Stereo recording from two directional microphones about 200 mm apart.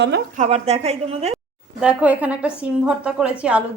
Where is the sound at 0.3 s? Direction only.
35° right (ahead or behind).